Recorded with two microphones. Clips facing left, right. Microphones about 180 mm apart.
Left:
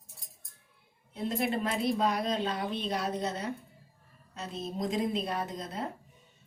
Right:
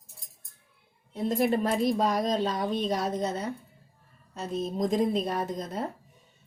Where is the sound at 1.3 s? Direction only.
45° right (ahead or behind).